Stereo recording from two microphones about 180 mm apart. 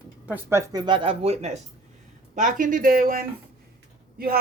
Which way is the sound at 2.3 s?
45° right (ahead or behind).